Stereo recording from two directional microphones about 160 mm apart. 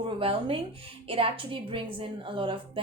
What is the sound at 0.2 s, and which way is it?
A woman's voice, 35° right (ahead or behind).